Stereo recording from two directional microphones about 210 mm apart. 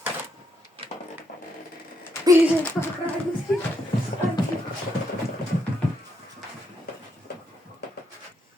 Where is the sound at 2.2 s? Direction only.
15° right (ahead or behind).